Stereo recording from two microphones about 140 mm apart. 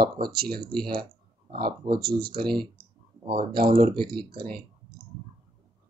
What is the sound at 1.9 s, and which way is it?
Speech, 90° right.